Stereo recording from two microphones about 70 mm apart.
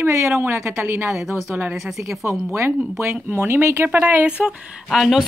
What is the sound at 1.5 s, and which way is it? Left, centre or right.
Speech, right.